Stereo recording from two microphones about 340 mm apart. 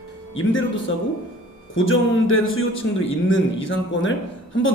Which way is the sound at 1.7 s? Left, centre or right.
Left.